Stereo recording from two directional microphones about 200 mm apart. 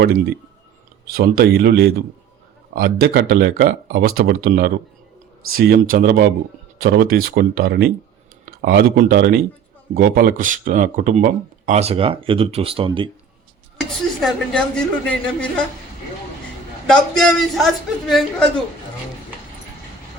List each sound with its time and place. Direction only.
0.0 s speech: 50° right (ahead or behind); by 13.1 s 25° right (ahead or behind)
13.7 s a woman's voice: centre (ahead or behind)
16.8 s a woman's voice: 5° left (ahead or behind)